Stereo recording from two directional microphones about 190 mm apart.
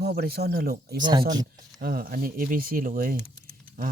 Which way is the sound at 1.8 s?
50° right (ahead or behind).